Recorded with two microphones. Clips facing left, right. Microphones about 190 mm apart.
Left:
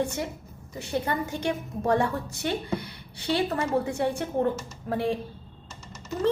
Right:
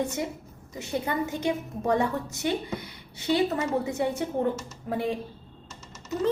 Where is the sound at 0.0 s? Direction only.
20° right (ahead or behind).